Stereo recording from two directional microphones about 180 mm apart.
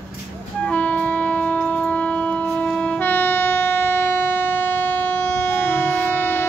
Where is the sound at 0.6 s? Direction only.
10° left (ahead or behind).